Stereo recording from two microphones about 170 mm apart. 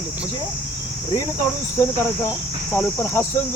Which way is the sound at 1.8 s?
15° left (ahead or behind).